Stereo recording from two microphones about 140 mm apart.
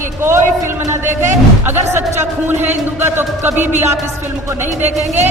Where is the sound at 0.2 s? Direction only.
15° right (ahead or behind).